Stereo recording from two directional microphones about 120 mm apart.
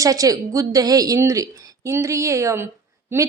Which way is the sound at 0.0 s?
30° right (ahead or behind).